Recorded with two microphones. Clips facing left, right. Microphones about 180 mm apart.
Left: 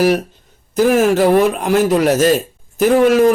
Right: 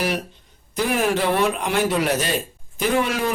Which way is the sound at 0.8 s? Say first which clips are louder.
Left 9 dB; 45° left (ahead or behind).